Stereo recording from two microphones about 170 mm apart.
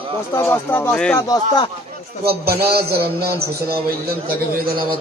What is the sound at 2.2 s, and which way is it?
A man's voice, 70° right (ahead or behind).